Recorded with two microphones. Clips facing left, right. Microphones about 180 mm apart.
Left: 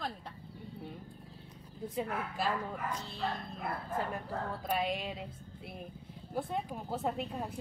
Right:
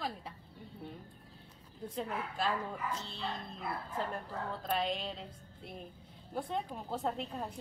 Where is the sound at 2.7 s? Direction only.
40° left (ahead or behind).